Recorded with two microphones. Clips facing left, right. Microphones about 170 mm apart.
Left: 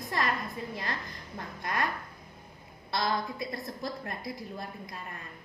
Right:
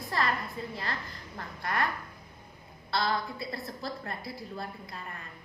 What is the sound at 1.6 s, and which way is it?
Speech, 20° left (ahead or behind).